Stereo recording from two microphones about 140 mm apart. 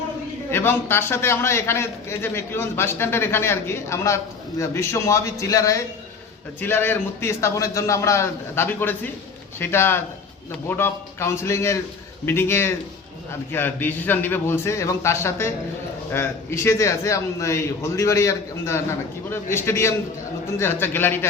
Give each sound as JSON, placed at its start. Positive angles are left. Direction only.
{"t": 0.5, "sound": "a man's voice", "side_deg": 15}